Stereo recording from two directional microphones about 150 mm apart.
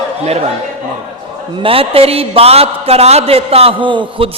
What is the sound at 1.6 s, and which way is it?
A man's voice, 40° right (ahead or behind).